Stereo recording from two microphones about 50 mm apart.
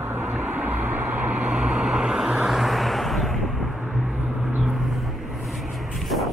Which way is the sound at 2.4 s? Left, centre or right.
Centre.